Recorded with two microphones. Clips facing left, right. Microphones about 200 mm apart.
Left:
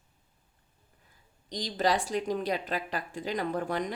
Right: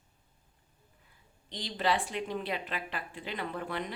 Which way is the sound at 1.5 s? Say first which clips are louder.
Left 3 dB; 40° left (ahead or behind).